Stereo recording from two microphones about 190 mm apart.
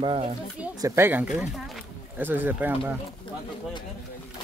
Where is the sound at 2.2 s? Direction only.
10° right (ahead or behind).